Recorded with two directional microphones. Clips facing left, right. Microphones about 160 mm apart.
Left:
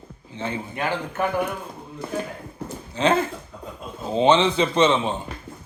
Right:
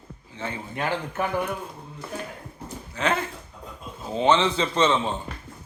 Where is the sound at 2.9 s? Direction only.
25° left (ahead or behind).